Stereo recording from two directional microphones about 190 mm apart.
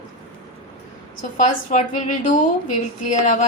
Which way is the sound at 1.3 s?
40° left (ahead or behind).